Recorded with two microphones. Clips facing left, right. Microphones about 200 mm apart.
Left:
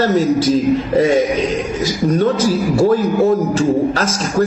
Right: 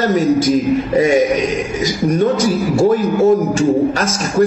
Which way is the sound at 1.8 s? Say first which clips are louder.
Right 1 dB; 15° right (ahead or behind).